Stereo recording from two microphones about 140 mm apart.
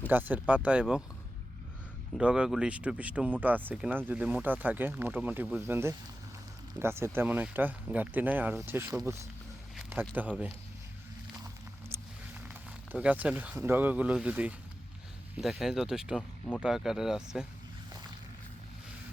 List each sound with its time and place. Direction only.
0.1 s speech: 15° right (ahead or behind)
2.1 s speech: 5° right (ahead or behind)
12.9 s speech: 10° right (ahead or behind)